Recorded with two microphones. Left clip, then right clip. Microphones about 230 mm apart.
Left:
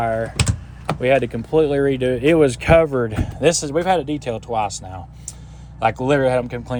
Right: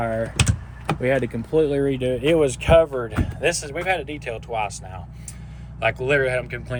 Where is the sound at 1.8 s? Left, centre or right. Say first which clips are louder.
Left 4 dB; left.